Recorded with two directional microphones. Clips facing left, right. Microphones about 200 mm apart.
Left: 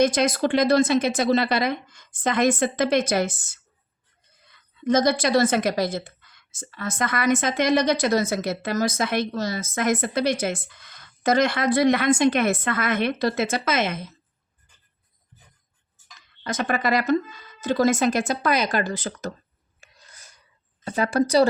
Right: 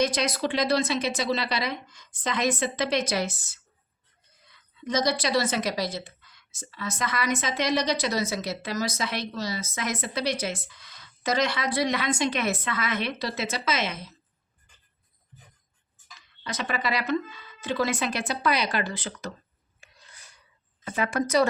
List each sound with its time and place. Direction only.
0.0 s a woman's voice: 50° left (ahead or behind)
4.8 s a woman's voice: 50° left (ahead or behind)
16.4 s a woman's voice: 50° left (ahead or behind)
19.8 s filing: 40° left (ahead or behind)
20.8 s speech: 35° left (ahead or behind)